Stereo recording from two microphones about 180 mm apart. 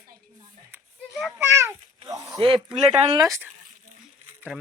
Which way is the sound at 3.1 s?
20° right (ahead or behind).